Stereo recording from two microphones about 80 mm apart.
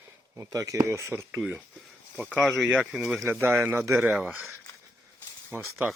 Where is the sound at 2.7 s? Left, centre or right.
Centre.